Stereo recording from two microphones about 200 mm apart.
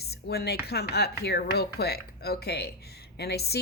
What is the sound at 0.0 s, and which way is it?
Speech, 55° left (ahead or behind).